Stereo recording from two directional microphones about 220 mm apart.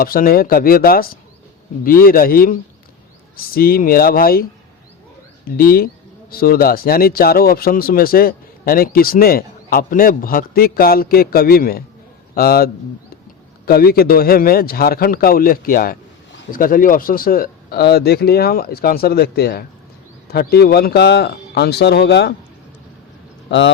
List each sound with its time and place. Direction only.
0.0 s a man's voice: 40° left (ahead or behind)
5.5 s a man's voice: 40° left (ahead or behind)
23.5 s a man's voice: 55° left (ahead or behind)